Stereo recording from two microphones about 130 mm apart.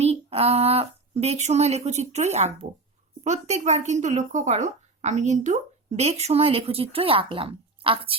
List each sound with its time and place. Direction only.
0.0 s speech: 50° right (ahead or behind)